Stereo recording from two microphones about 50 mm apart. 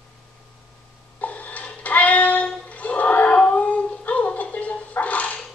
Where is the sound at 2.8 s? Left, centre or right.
Left.